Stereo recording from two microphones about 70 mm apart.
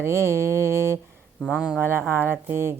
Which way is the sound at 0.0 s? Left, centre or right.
Right.